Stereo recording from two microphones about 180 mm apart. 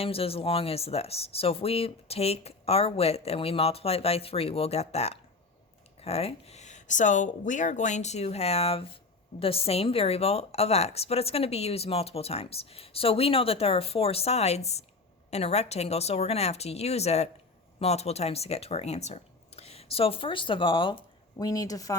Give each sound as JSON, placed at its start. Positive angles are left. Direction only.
{"t": 0.0, "sound": "a woman's voice", "side_deg": 30}